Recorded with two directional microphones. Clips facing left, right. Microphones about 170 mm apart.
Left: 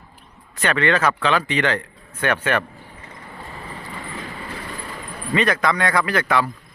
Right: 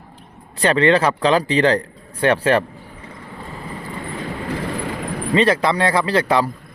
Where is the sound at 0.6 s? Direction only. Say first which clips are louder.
Right 4 dB; 30° right (ahead or behind).